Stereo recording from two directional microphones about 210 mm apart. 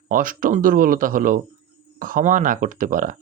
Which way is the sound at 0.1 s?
40° right (ahead or behind).